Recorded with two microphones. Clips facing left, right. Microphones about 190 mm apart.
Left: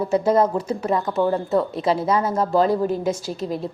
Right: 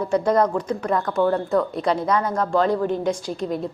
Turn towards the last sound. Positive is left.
turn(degrees=0)  # may be behind; listen again after turning